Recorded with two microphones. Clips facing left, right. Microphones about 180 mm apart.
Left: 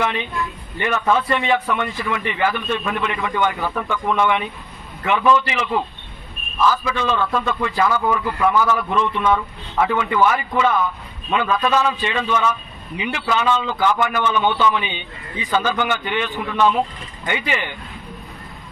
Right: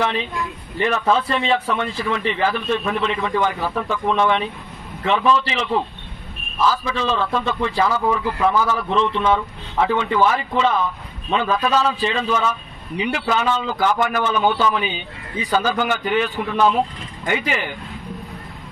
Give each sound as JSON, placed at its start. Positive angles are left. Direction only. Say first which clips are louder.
{"t": 0.0, "sound": "a man's voice", "louder": "even", "side_deg": -35}
{"t": 6.8, "sound": "a man's voice", "louder": "left 1 dB", "side_deg": -30}